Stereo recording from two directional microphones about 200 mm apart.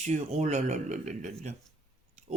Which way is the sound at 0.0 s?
35° right (ahead or behind).